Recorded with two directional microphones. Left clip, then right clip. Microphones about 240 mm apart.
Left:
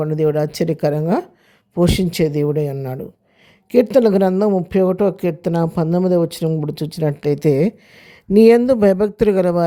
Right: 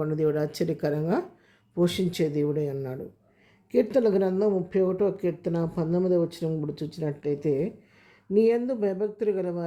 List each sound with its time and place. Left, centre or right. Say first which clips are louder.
0.0 s speech: left 8 dB; left